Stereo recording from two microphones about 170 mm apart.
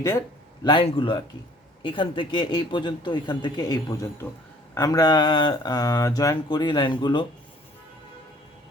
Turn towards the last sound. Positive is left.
turn(degrees=30)  # may be behind; listen again after turning